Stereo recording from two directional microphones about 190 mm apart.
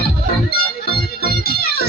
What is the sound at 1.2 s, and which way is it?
Music, 55° left (ahead or behind).